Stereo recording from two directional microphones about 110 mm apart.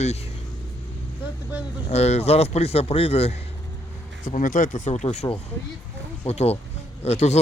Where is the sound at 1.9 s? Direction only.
80° left; by 3.4 s 65° left (ahead or behind).